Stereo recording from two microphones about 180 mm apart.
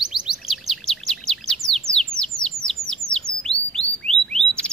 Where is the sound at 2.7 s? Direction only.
5° left (ahead or behind).